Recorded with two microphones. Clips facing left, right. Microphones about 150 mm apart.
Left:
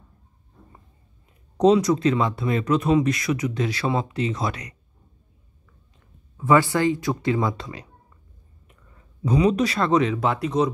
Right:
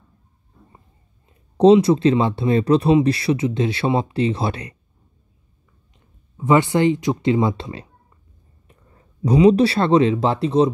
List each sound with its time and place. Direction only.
1.6 s speech: 25° right (ahead or behind)
5.9 s speech: 20° right (ahead or behind)
8.6 s speech: 35° right (ahead or behind)